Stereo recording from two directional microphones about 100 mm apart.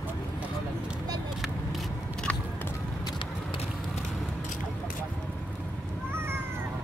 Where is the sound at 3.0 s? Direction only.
60° left (ahead or behind).